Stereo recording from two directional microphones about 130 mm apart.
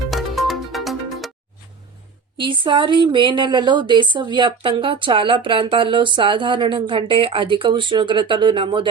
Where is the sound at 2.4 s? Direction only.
40° right (ahead or behind).